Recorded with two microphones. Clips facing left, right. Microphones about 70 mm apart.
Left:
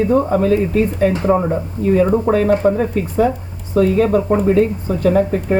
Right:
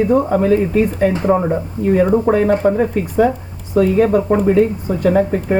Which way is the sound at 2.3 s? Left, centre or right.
Right.